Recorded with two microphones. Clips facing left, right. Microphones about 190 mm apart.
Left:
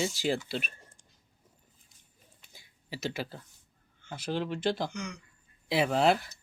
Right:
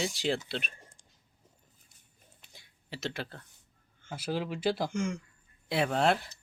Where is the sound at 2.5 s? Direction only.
5° left (ahead or behind).